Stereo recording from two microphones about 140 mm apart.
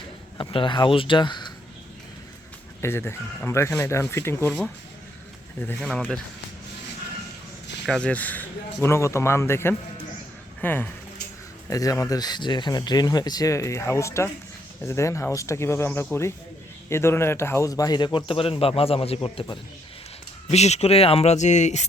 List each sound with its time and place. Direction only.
0.3 s a man's voice: 35° left (ahead or behind)
2.8 s speech: 15° left (ahead or behind)
5.8 s speech: 5° left (ahead or behind)
7.9 s speech: 5° left (ahead or behind)
11.7 s a man's voice: 25° left (ahead or behind); by 21.8 s 55° left (ahead or behind)